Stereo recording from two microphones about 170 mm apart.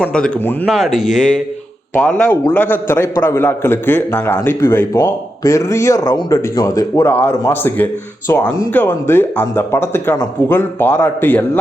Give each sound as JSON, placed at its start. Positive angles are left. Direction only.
{"t": 0.0, "sound": "speech", "side_deg": 5}
{"t": 1.0, "sound": "speech", "side_deg": 45}
{"t": 2.0, "sound": "a man's voice", "side_deg": 5}